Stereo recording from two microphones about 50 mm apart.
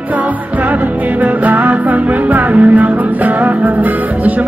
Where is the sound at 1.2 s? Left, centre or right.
Right.